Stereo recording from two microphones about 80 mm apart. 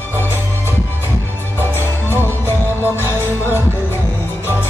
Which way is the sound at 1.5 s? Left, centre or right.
Left.